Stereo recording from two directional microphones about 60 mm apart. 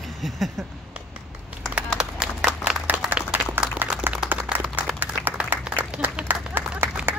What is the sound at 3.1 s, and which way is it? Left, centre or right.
Applause, right.